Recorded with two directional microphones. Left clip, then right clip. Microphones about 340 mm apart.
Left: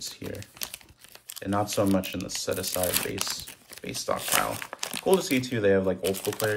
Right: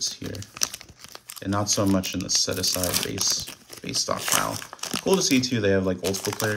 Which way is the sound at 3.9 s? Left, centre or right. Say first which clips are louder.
Right 3 dB; centre.